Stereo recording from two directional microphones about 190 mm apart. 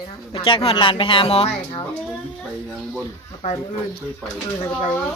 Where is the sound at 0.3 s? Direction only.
30° left (ahead or behind).